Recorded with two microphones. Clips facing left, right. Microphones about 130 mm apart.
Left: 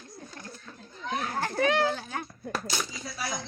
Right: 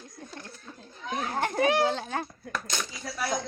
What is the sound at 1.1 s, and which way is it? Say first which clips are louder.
Speech: right 2 dB; 20° right (ahead or behind).